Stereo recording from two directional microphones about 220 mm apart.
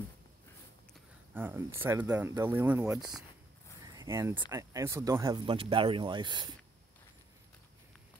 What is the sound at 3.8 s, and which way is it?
Speech, 15° right (ahead or behind).